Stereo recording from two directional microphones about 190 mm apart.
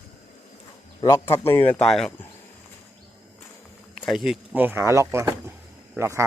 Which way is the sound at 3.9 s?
Centre (ahead or behind).